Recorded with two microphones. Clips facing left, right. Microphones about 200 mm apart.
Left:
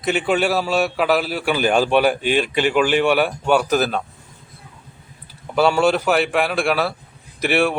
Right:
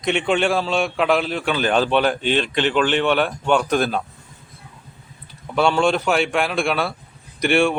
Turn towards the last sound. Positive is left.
turn(degrees=5)  # may be behind; listen again after turning